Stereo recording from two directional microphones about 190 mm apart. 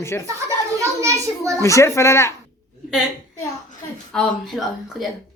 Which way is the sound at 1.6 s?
15° left (ahead or behind).